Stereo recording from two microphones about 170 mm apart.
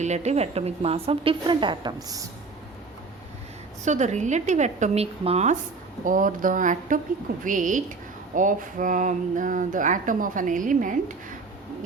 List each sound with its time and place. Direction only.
0.0 s a woman's voice: 40° right (ahead or behind); by 2.2 s 25° right (ahead or behind)
3.8 s speech: 45° right (ahead or behind)
6.1 s speech: 50° right (ahead or behind)